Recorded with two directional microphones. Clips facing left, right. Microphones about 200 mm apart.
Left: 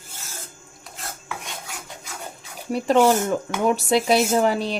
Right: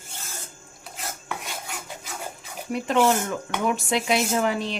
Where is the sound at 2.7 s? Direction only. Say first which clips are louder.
Left 4 dB; 35° left (ahead or behind).